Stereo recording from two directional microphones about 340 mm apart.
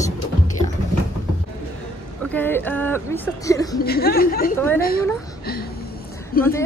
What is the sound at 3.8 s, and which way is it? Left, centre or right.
Speech, left.